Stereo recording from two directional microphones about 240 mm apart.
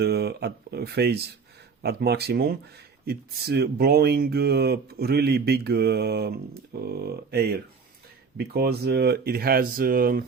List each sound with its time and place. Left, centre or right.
0.0 s speech: right